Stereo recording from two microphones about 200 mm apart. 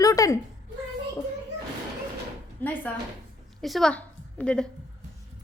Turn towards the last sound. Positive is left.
turn(degrees=5)  # may be behind; listen again after turning